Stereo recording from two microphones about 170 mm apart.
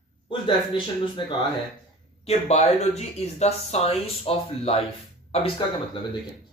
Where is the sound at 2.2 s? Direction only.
40° left (ahead or behind).